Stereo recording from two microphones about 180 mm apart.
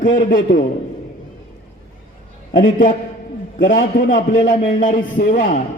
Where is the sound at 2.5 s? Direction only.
50° left (ahead or behind).